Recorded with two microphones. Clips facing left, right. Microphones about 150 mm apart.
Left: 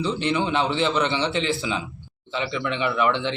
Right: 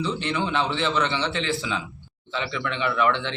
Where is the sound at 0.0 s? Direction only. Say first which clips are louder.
Left 3 dB; 20° left (ahead or behind).